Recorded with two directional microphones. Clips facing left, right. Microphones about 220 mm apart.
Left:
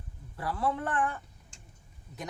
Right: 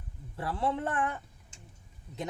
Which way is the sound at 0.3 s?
25° right (ahead or behind).